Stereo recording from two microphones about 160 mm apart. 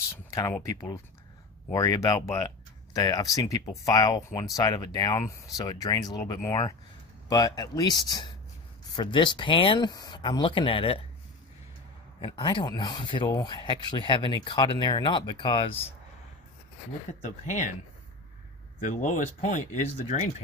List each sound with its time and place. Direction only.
0.3 s speech: 20° left (ahead or behind)
12.2 s speech: 30° left (ahead or behind)
17.2 s speech: 50° left (ahead or behind)
18.8 s speech: 55° left (ahead or behind)